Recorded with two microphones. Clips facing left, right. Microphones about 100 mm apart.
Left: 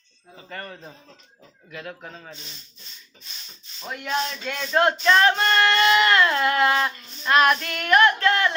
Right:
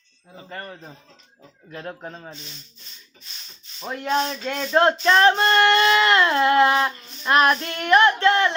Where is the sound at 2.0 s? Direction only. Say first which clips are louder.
Right 4 dB; 25° right (ahead or behind).